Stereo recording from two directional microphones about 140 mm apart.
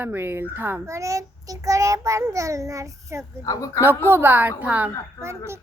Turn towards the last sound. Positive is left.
turn(degrees=-20)  # may be behind; listen again after turning